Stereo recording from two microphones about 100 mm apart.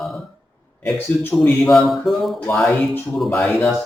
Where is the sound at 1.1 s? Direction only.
20° left (ahead or behind).